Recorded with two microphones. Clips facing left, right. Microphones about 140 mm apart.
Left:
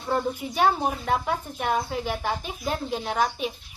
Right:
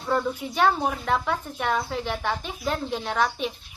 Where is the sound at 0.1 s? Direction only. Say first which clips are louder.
Right 1 dB; 15° left (ahead or behind).